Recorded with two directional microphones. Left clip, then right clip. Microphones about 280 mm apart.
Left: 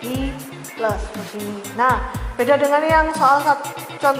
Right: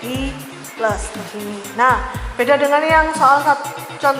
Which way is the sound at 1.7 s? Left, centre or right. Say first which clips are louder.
Right 3 dB; centre.